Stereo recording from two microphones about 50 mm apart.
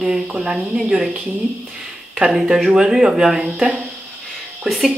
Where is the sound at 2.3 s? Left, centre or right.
Centre.